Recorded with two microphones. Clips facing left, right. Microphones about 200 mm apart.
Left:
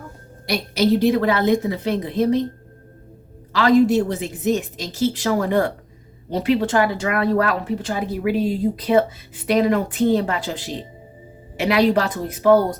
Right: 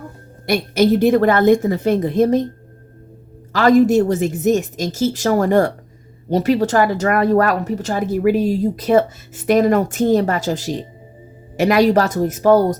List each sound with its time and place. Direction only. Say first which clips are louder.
0.4 s a woman's voice: right 4 dB; 50° right (ahead or behind)
3.5 s a woman's voice: right 3 dB; 45° right (ahead or behind)